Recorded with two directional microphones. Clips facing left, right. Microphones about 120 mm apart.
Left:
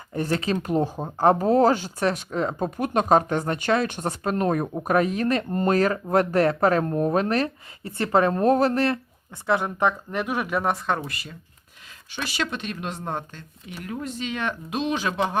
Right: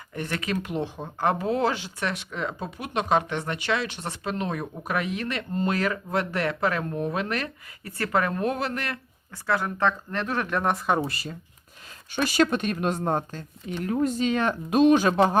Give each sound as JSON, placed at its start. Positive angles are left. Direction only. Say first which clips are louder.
{"t": 0.1, "sound": "speech", "louder": "left 5 dB", "side_deg": 30}
{"t": 11.0, "sound": "speech", "louder": "right 4 dB", "side_deg": -35}